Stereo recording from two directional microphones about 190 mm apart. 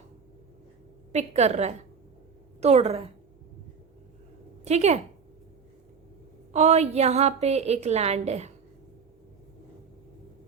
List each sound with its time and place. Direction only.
1.1 s a woman's voice: 35° right (ahead or behind)
4.6 s a woman's voice: 35° right (ahead or behind)
6.5 s a woman's voice: 35° right (ahead or behind)